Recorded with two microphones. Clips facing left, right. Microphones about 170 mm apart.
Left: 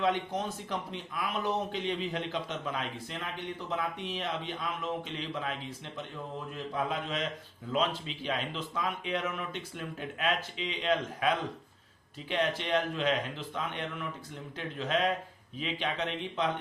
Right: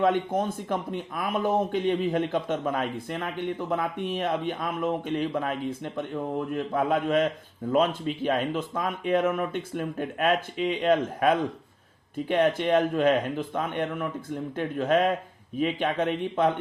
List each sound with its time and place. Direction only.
0.0 s speech: 50° right (ahead or behind)